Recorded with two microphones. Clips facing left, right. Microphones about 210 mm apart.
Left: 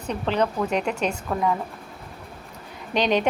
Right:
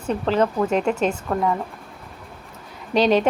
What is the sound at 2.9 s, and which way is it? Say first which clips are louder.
Speech: right 4 dB; 35° right (ahead or behind).